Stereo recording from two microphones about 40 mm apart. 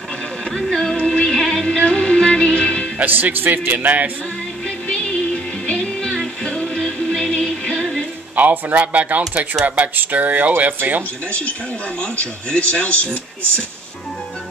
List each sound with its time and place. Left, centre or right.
0.5 s music: centre
0.9 s music: left
1.8 s music: left
3.0 s speech: right
4.6 s music: left
6.7 s music: centre
7.4 s music: left
8.4 s speech: right
12.4 s speech: left